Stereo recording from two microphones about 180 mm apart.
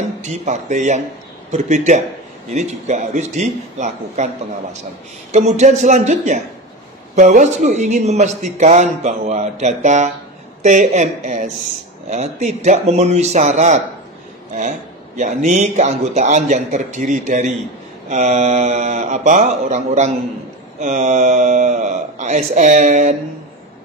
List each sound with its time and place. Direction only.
0.2 s speech: 40° right (ahead or behind)
5.3 s a man's voice: 40° right (ahead or behind)